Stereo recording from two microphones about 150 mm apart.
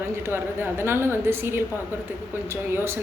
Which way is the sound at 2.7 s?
15° right (ahead or behind).